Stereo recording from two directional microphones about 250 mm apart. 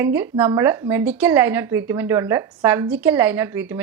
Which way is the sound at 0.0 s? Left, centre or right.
Centre.